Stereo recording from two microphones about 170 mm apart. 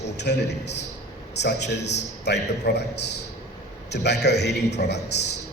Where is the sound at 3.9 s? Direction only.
80° left.